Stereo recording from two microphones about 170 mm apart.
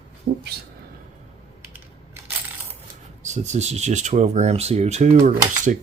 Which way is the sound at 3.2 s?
45° right (ahead or behind).